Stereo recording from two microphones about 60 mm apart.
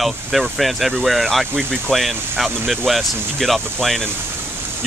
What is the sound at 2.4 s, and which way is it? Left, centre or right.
Speech, centre.